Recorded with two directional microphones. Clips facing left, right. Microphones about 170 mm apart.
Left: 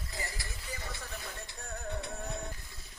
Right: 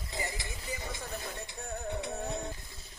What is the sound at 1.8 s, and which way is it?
Music, 20° right (ahead or behind).